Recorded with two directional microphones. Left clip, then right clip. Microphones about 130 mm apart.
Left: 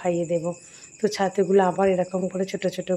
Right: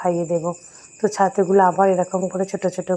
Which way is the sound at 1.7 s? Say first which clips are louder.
Right 5 dB; 10° left (ahead or behind).